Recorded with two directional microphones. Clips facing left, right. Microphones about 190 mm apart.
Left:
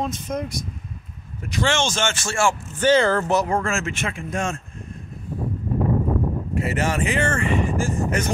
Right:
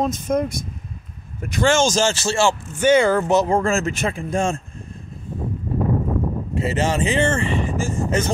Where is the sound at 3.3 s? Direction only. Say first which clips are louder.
Right 4 dB; 30° right (ahead or behind).